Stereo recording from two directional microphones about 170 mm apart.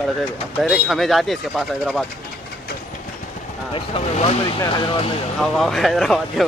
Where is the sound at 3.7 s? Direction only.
35° left (ahead or behind).